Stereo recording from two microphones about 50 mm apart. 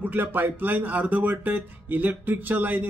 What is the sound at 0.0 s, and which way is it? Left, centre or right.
Speech, right.